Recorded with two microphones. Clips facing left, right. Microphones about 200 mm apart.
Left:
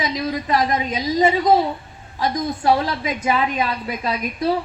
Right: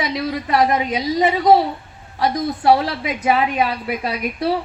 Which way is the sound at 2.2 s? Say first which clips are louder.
Right 2 dB; 65° right (ahead or behind).